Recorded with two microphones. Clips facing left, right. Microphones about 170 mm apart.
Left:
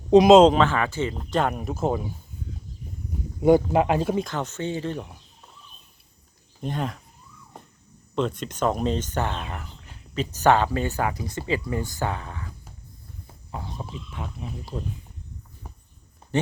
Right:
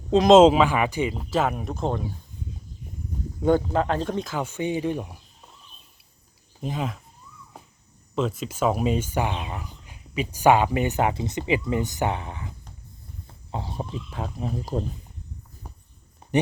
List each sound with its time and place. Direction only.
0.3 s speech: 5° right (ahead or behind)
3.4 s speech: 15° left (ahead or behind)
4.3 s speech: 10° right (ahead or behind)
6.6 s speech: centre (ahead or behind)
8.1 s speech: 5° right (ahead or behind); by 13.8 s 30° right (ahead or behind)
14.1 s speech: 40° right (ahead or behind)